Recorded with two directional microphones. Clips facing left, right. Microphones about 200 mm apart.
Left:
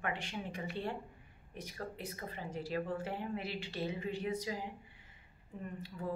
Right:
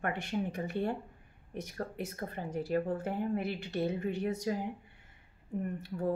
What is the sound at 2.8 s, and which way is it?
Speech, 45° right (ahead or behind).